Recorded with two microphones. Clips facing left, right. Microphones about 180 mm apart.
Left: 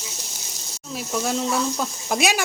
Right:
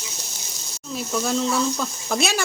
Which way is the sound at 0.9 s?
10° left (ahead or behind).